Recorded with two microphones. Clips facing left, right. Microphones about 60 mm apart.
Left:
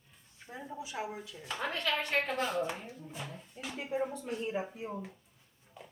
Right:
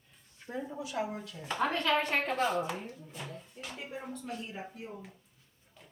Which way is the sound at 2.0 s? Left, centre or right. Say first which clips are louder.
Right 2 dB; centre.